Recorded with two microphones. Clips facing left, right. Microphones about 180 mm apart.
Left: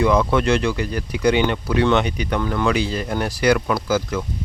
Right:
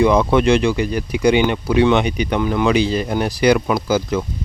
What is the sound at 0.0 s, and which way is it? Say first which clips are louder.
Speech: right 4 dB; 15° right (ahead or behind).